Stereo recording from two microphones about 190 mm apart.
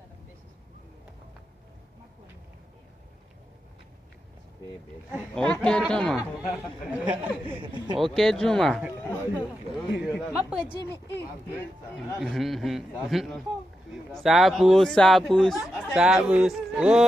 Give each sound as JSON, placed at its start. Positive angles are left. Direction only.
{"t": 5.1, "sound": "speech", "side_deg": 5}
{"t": 6.5, "sound": "speech", "side_deg": -5}
{"t": 7.6, "sound": "speech", "side_deg": -25}
{"t": 8.0, "sound": "speech", "side_deg": 0}
{"t": 12.0, "sound": "speech", "side_deg": 0}